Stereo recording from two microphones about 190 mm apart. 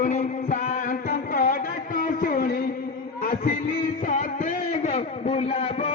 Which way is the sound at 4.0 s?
40° left (ahead or behind).